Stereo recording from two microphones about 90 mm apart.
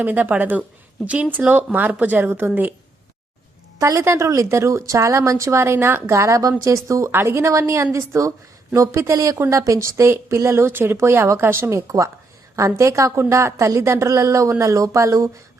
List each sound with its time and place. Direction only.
0.0 s speech: 20° right (ahead or behind)
3.8 s a woman's voice: 35° right (ahead or behind)